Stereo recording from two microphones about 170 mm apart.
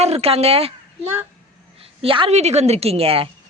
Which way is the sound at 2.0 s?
30° right (ahead or behind).